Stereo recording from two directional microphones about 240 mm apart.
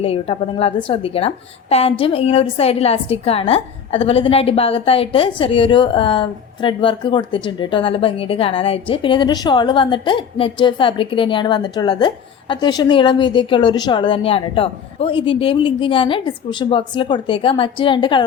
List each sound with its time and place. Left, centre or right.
0.0 s a woman's voice: left